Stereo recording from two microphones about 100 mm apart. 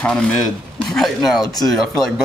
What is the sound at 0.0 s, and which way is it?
Speech, 10° left (ahead or behind).